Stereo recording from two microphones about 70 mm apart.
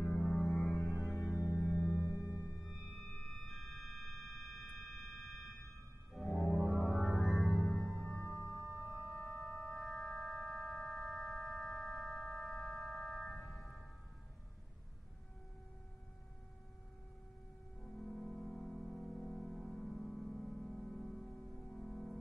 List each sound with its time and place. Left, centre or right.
0.0 s organ: centre
2.2 s music: left
2.5 s music: centre
8.5 s a sound: centre
17.7 s music: centre